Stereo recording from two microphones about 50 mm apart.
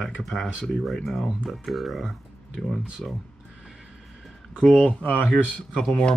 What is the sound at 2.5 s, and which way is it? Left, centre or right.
Speech, centre.